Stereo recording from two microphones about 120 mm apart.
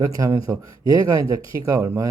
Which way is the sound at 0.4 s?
30° right (ahead or behind).